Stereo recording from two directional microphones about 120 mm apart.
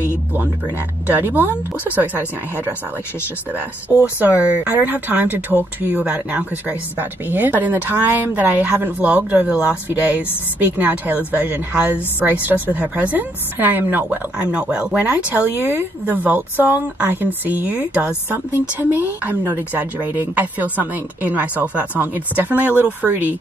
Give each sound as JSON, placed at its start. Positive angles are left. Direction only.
{"t": 1.1, "sound": "speech", "side_deg": -15}
{"t": 4.2, "sound": "speech", "side_deg": -15}